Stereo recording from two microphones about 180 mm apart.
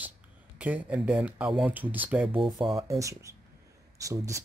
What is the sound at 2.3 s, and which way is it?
Speech, 30° right (ahead or behind).